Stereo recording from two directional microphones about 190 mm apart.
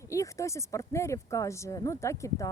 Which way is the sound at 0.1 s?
15° left (ahead or behind).